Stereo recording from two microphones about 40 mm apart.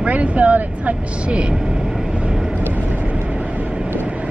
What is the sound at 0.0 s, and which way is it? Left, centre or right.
Speech, right.